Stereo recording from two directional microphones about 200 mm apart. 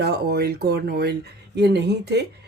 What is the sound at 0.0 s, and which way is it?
Speech, 55° right (ahead or behind).